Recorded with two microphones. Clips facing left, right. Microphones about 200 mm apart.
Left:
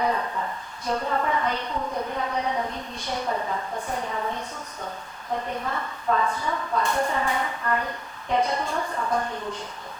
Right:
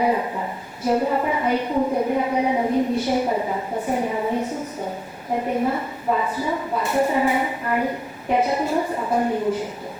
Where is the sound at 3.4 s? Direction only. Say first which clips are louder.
Right 5 dB; 20° right (ahead or behind).